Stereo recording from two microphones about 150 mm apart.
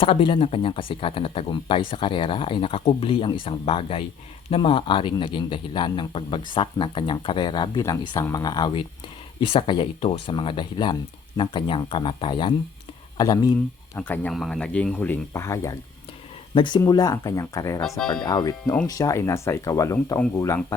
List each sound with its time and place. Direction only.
0.0 s speech: 35° left (ahead or behind)
14.0 s speech: 10° left (ahead or behind)
14.3 s speech: centre (ahead or behind); by 15.7 s 20° left (ahead or behind)
16.6 s speech: 30° left (ahead or behind)
17.8 s speech: centre (ahead or behind)
18.3 s speech: 25° left (ahead or behind)